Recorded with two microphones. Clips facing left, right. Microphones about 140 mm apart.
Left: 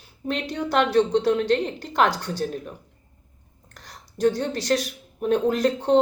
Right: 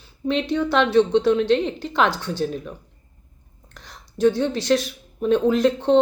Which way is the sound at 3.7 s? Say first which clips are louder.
Right 3 dB; 40° left (ahead or behind).